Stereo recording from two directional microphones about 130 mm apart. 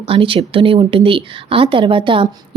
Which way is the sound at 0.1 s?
45° right (ahead or behind).